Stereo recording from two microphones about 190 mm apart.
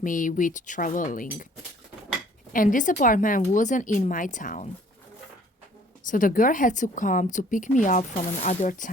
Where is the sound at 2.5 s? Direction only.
45° left (ahead or behind).